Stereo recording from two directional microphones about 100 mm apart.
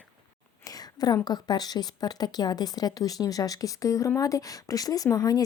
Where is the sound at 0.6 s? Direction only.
40° left (ahead or behind).